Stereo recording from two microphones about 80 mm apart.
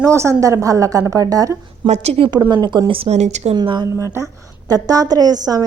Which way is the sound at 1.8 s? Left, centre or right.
Right.